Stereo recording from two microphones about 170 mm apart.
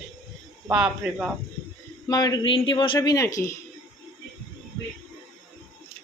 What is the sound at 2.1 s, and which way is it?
Speech, 25° left (ahead or behind).